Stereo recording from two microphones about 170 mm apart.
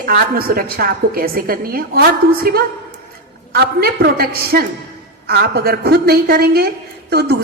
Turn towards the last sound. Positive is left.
turn(degrees=-75)  # may be behind; listen again after turning